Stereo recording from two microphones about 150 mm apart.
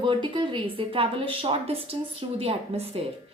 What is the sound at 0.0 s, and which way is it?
A woman's voice, 35° right (ahead or behind).